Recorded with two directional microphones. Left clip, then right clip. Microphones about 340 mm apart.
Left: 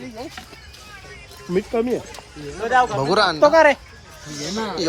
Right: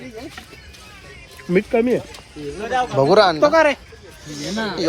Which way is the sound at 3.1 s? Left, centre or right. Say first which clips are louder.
Right 4 dB; centre.